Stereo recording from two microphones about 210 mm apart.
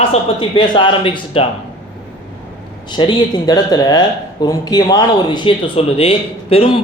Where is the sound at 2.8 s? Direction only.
20° left (ahead or behind).